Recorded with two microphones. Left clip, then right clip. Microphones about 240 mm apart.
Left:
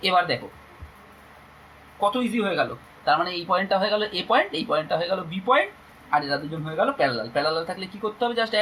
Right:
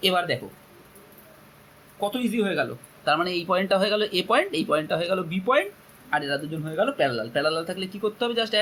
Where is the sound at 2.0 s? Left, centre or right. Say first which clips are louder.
Left 3 dB; right.